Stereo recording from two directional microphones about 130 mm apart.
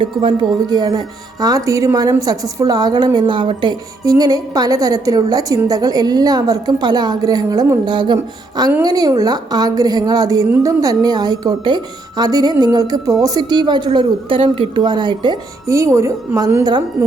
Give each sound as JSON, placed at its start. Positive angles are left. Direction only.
{"t": 0.0, "sound": "a woman's voice", "side_deg": -40}
{"t": 15.6, "sound": "speech", "side_deg": -25}